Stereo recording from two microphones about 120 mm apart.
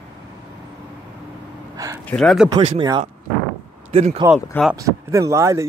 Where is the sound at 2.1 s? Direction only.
5° left (ahead or behind).